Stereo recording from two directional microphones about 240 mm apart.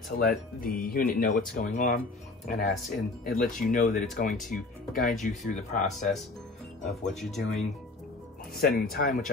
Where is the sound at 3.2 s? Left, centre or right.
Left.